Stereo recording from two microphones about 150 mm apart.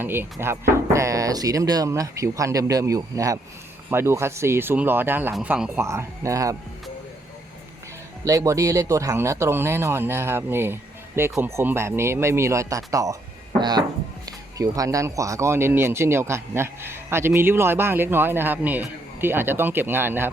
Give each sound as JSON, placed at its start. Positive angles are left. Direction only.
{"t": 0.0, "sound": "speech", "side_deg": -15}
{"t": 5.8, "sound": "speech", "side_deg": -20}
{"t": 8.2, "sound": "speech", "side_deg": -20}